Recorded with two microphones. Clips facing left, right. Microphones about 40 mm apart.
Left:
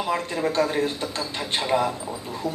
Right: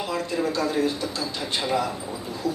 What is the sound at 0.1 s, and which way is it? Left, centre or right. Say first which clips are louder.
Speech: even; left.